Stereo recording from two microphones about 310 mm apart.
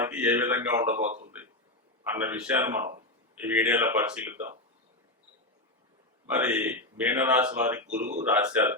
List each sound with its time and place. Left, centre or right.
0.0 s speech: centre
1.0 s speech: right
2.1 s speech: centre
6.4 s speech: centre
7.9 s speech: right
8.2 s speech: centre